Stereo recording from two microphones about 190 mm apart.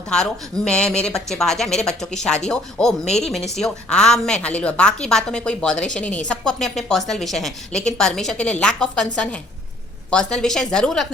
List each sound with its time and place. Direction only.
0.1 s a woman's voice: 5° left (ahead or behind)